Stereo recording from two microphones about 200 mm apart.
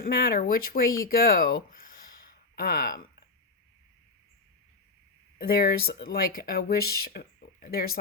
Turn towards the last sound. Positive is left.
turn(degrees=50)  # may be behind; listen again after turning